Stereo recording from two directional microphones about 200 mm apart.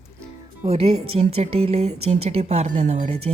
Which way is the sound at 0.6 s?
30° right (ahead or behind).